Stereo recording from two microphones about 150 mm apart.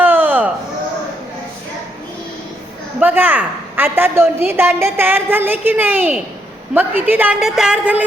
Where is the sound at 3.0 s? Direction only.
10° right (ahead or behind).